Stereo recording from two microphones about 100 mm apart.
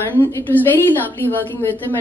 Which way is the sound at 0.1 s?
20° left (ahead or behind).